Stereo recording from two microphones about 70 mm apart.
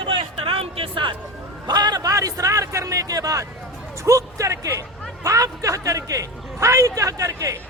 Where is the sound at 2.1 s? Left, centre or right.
Right.